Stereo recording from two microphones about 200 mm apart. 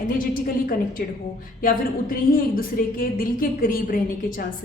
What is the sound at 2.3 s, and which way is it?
A woman's voice, 45° left (ahead or behind).